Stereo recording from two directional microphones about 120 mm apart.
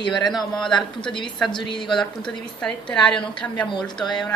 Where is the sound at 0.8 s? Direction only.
40° left (ahead or behind).